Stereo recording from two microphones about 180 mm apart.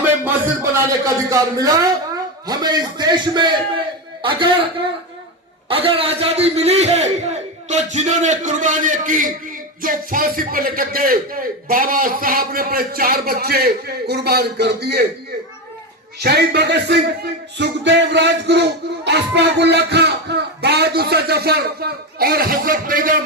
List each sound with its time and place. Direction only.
0.3 s a man's voice: 15° right (ahead or behind)
5.6 s a man's voice: 30° right (ahead or behind); by 15.0 s 65° right (ahead or behind)
16.2 s music: 65° right (ahead or behind); by 23.1 s 50° right (ahead or behind)